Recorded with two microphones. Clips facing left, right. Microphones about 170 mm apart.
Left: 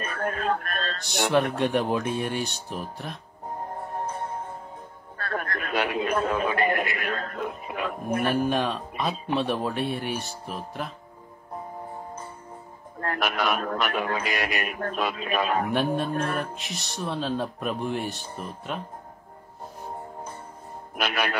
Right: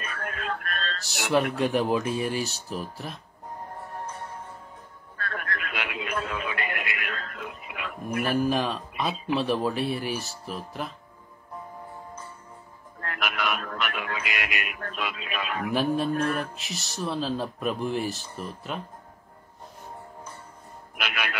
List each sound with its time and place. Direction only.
0.0 s music: 35° left (ahead or behind)
1.0 s speech: centre (ahead or behind)
5.1 s radio: 40° left (ahead or behind)
8.2 s speech: centre (ahead or behind)
13.0 s speech: 40° left (ahead or behind)
15.7 s speech: centre (ahead or behind)
16.1 s speech: 35° left (ahead or behind)
16.3 s speech: centre (ahead or behind)
20.9 s a man's voice: 40° left (ahead or behind)